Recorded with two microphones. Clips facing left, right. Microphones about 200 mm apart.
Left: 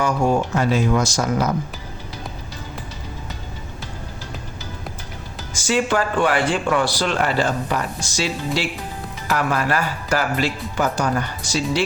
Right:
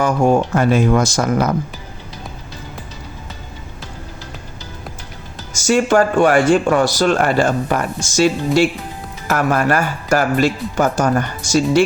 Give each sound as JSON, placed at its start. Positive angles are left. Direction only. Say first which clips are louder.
{"t": 0.0, "sound": "speech", "louder": "right 4 dB", "side_deg": -50}
{"t": 5.5, "sound": "speech", "louder": "right 6 dB", "side_deg": -45}